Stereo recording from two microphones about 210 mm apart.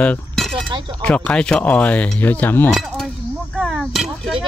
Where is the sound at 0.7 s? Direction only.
20° right (ahead or behind).